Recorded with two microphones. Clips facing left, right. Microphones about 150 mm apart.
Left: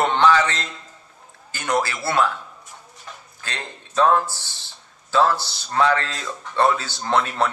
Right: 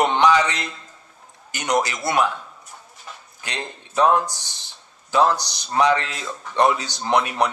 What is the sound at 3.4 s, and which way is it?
A man's voice, 15° right (ahead or behind).